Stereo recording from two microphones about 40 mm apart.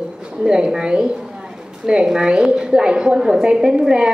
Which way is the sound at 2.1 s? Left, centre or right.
Centre.